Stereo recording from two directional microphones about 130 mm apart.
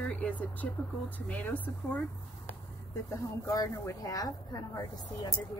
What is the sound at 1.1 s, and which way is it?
Speech, 10° left (ahead or behind).